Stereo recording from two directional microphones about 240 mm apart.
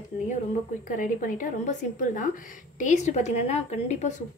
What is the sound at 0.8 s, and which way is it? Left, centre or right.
A woman's voice, left.